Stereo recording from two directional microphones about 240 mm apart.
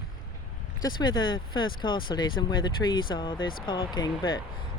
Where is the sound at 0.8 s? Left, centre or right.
Centre.